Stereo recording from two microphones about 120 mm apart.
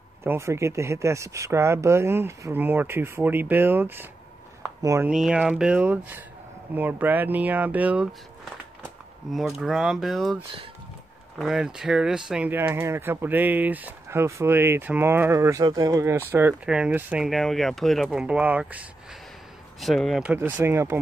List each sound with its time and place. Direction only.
0.2 s speech: 20° right (ahead or behind)
5.0 s speech: 5° right (ahead or behind)
9.6 s speech: 5° right (ahead or behind)
11.3 s speech: 5° right (ahead or behind)
17.3 s speech: centre (ahead or behind)
19.8 s speech: centre (ahead or behind)
20.3 s speech: 15° right (ahead or behind)